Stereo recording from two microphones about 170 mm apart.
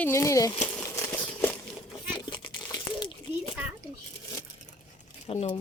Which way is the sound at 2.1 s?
25° left (ahead or behind).